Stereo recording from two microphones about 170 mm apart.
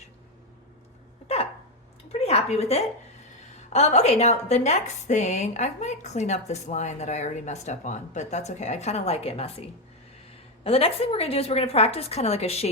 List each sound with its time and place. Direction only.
1.3 s hiccup: 35° left (ahead or behind)
2.1 s a sound: 35° left (ahead or behind)
3.7 s a woman's voice: 40° left (ahead or behind)